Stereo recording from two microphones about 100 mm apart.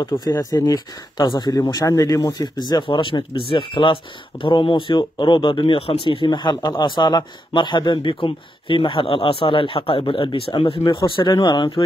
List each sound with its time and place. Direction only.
0.4 s speech: 40° left (ahead or behind)
1.7 s a man's voice: 35° left (ahead or behind)